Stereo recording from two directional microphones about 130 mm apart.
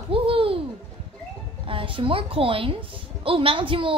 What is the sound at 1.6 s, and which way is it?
A woman's voice, 40° right (ahead or behind).